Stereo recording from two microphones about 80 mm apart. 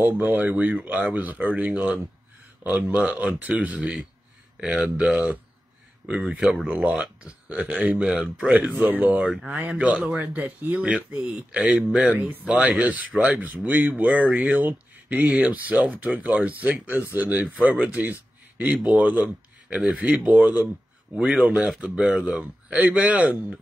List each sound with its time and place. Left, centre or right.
0.0 s speech: right
8.5 s speech: right